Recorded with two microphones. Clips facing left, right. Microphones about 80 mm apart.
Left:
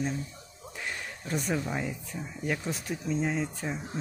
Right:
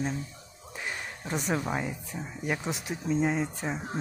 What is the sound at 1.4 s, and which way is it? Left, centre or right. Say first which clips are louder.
Speech: right 2 dB; centre.